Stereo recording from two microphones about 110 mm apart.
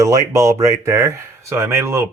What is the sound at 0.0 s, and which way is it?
Speech, 30° right (ahead or behind).